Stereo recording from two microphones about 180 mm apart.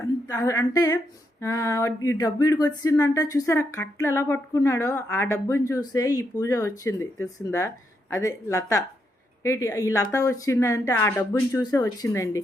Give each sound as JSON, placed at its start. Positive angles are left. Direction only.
{"t": 0.3, "sound": "humming", "side_deg": 20}
{"t": 1.4, "sound": "speech", "side_deg": 20}